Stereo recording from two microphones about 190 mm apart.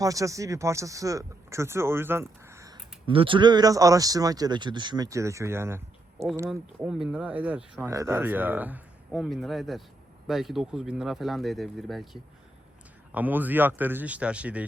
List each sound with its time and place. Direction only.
0.0 s speech: 15° right (ahead or behind)
3.1 s speech: 25° right (ahead or behind); by 14.6 s 5° right (ahead or behind)